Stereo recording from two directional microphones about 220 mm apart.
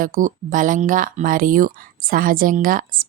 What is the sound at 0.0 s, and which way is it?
Speech, 40° right (ahead or behind).